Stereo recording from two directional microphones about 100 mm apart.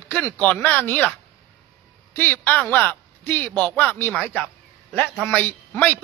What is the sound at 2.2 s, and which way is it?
Speech, 20° left (ahead or behind).